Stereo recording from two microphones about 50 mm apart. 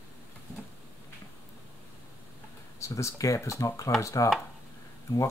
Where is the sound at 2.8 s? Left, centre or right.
Left.